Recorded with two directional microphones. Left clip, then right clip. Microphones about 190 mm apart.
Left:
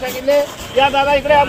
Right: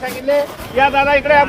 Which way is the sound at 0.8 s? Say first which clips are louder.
Right 1 dB; centre (ahead or behind).